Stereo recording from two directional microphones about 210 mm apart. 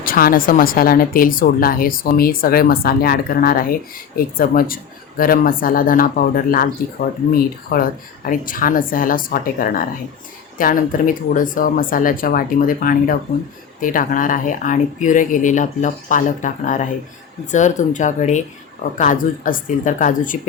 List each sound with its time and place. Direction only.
0.0 s a woman's voice: 45° left (ahead or behind)
7.7 s speech: 45° left (ahead or behind)